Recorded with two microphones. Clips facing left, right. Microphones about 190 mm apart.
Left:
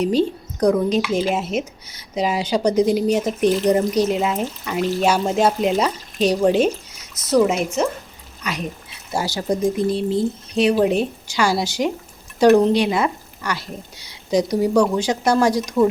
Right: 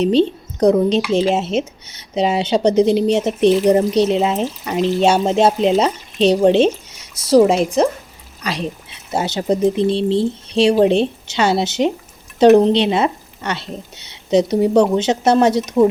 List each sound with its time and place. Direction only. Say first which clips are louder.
0.0 s speech: right 4 dB; 25° right (ahead or behind)
9.1 s speech: right 4 dB; 20° right (ahead or behind)